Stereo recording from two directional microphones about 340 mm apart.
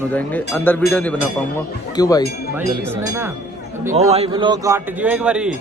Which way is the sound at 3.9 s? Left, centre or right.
Centre.